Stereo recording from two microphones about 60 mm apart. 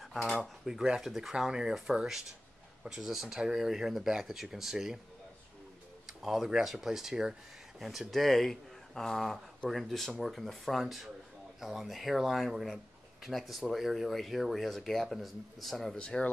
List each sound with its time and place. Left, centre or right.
0.0 s speech: centre
6.0 s speech: centre
8.1 s speech: centre
16.0 s speech: centre